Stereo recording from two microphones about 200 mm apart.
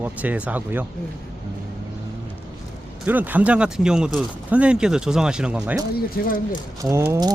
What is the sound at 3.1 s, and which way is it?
Speech, 10° right (ahead or behind).